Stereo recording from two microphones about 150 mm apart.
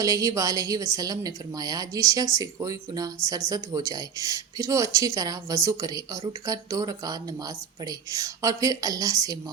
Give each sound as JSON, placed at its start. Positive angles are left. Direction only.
{"t": 0.0, "sound": "speech", "side_deg": -25}